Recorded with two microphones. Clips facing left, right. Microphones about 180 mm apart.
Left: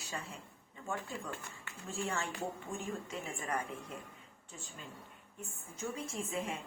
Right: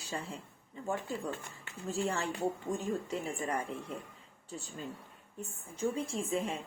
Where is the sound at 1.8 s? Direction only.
35° right (ahead or behind).